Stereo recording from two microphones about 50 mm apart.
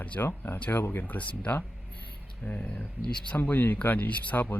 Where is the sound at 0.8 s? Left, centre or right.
Left.